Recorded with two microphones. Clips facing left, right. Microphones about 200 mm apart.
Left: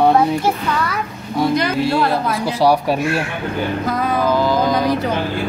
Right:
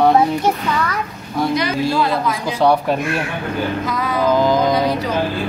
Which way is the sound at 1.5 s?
55° left (ahead or behind).